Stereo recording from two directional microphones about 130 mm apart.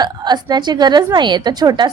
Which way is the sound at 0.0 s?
35° right (ahead or behind).